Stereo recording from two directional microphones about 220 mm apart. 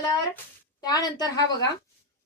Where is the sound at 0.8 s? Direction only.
15° left (ahead or behind).